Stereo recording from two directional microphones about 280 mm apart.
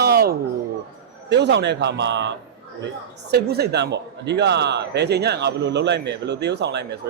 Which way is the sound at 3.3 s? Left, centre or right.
Right.